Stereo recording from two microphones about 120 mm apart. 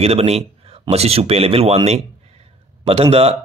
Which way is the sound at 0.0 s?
55° right (ahead or behind).